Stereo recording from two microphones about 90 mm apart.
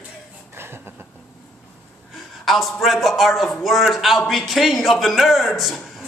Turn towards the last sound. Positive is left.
turn(degrees=0)  # may be behind; listen again after turning